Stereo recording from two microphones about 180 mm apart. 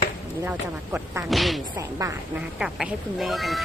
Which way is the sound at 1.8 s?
15° right (ahead or behind).